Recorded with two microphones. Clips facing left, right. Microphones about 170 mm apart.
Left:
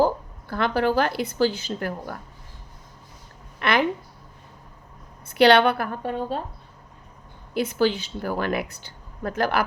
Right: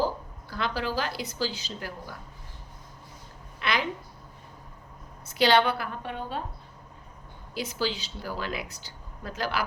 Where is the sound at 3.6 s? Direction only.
55° left (ahead or behind).